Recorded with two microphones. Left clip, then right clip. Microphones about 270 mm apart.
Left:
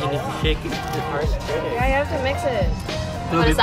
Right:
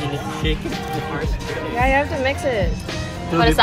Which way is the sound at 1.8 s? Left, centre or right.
Right.